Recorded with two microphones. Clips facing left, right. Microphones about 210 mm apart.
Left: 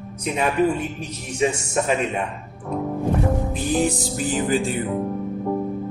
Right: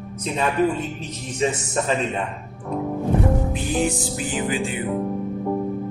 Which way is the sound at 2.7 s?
Centre (ahead or behind).